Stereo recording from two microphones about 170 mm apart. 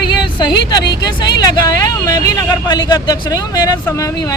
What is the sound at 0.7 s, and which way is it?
Speech, 25° left (ahead or behind).